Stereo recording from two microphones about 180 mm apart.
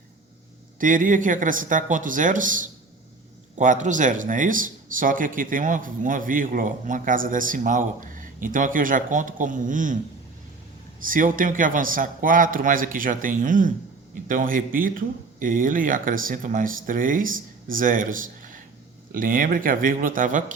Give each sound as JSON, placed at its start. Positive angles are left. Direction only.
{"t": 0.8, "sound": "speech", "side_deg": -50}
{"t": 11.0, "sound": "speech", "side_deg": -50}